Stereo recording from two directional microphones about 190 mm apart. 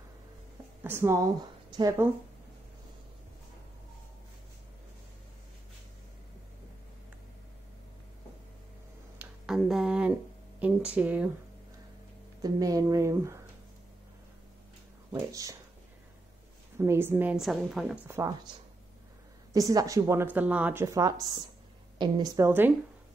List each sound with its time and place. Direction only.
0.8 s speech: 15° right (ahead or behind)
9.2 s a sound: centre (ahead or behind)
12.4 s speech: 20° right (ahead or behind)
15.1 s speech: 15° right (ahead or behind)
16.7 s speech: 15° right (ahead or behind)
18.0 s speech: 15° right (ahead or behind)
19.5 s speech: 20° right (ahead or behind)